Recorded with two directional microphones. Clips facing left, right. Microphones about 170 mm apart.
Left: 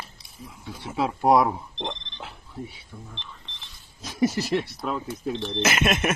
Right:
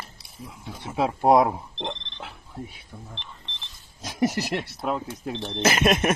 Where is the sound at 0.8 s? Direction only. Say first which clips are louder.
Right 1 dB; 20° right (ahead or behind).